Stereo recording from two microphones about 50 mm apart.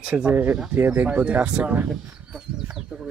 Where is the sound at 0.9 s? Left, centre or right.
Right.